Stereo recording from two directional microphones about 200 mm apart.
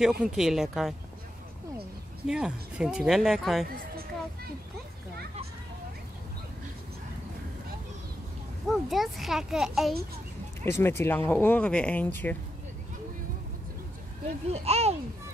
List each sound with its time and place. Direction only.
0.0 s speech: 5° right (ahead or behind)
2.2 s speech: 5° right (ahead or behind)
8.6 s speech: centre (ahead or behind)
10.6 s speech: 10° left (ahead or behind)
14.5 s a child's voice: 30° right (ahead or behind)